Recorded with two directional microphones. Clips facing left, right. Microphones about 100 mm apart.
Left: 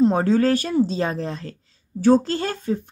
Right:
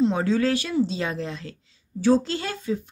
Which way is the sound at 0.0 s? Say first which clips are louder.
Left 4 dB; 45° left (ahead or behind).